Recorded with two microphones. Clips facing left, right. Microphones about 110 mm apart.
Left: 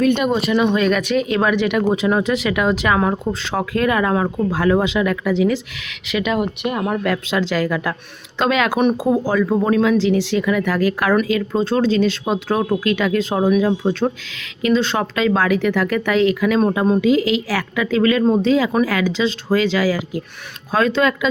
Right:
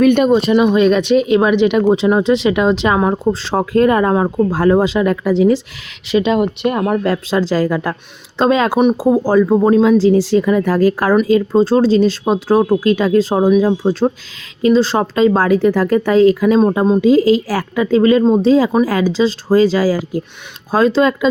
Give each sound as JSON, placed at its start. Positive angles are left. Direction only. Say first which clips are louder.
{"t": 0.0, "sound": "speech", "louder": "right 6 dB", "side_deg": -55}
{"t": 0.3, "sound": "speech", "louder": "right 5 dB", "side_deg": -25}
{"t": 10.0, "sound": "speech", "louder": "right 6 dB", "side_deg": -40}